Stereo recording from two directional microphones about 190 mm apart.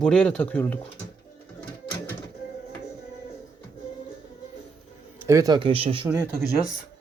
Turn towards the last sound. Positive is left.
turn(degrees=-15)  # may be behind; listen again after turning